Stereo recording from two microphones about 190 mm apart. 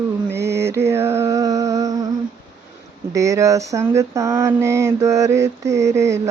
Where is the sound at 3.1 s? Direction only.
15° right (ahead or behind).